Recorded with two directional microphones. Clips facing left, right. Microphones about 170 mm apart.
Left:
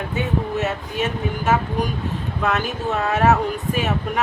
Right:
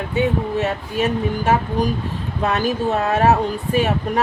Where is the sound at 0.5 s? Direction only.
35° right (ahead or behind).